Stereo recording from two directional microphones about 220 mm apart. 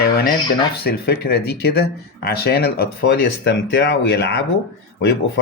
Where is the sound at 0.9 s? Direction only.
45° left (ahead or behind).